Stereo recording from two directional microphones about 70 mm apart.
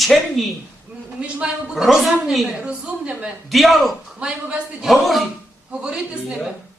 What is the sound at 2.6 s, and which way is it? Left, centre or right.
Speech, centre.